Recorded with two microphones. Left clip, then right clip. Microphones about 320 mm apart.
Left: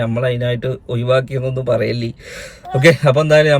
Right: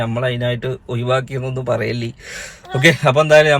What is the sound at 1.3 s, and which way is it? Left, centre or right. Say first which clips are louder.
Speech: left 3 dB; right.